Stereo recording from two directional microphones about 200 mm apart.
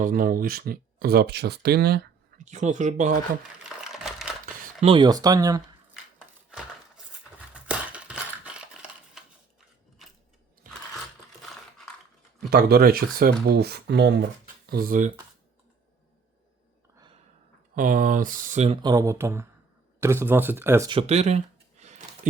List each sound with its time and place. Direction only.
0.0 s speech: 45° right (ahead or behind)
2.4 s speech: 35° right (ahead or behind)
3.6 s a sound: centre (ahead or behind)
4.6 s speech: 30° right (ahead or behind)
6.5 s crumpling: 5° right (ahead or behind)
7.5 s a sound: 5° right (ahead or behind)
12.5 s speech: 50° right (ahead or behind)
14.7 s speech: 45° right (ahead or behind)
17.7 s speech: 40° right (ahead or behind)
18.8 s speech: 20° right (ahead or behind)
20.9 s a sound: 35° right (ahead or behind)